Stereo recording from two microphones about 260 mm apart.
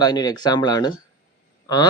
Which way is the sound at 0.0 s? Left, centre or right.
Centre.